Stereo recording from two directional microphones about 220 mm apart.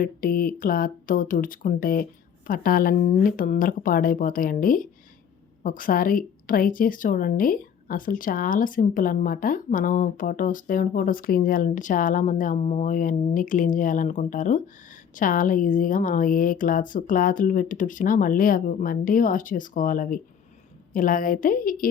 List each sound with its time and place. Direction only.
0.0 s speech: 40° left (ahead or behind)